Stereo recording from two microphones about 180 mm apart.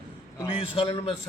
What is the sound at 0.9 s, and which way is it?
Speech, 30° left (ahead or behind).